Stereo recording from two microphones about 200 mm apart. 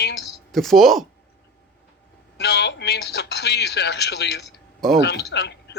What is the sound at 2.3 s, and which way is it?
Speech, 55° left (ahead or behind).